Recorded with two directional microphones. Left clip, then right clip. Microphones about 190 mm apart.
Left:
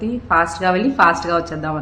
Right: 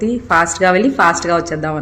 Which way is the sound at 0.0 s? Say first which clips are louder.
Right 3 dB; 20° right (ahead or behind).